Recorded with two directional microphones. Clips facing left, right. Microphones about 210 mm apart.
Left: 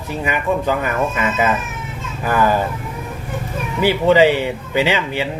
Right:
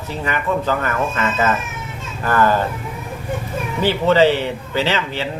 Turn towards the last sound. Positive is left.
turn(degrees=15)  # may be behind; listen again after turning